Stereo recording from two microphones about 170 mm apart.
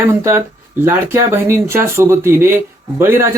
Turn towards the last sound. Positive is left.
turn(degrees=-15)  # may be behind; listen again after turning